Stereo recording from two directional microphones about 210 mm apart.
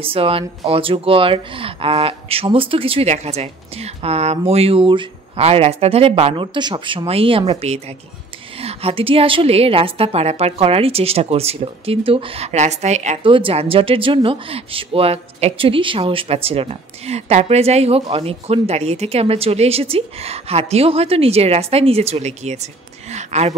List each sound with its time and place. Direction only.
0.0 s speech: 25° right (ahead or behind)